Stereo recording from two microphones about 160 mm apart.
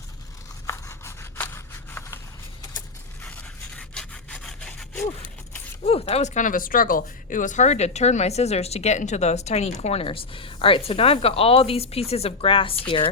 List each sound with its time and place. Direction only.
0.7 s a sound: 15° left (ahead or behind)
3.2 s sawing: 5° left (ahead or behind)
5.8 s speech: 40° left (ahead or behind)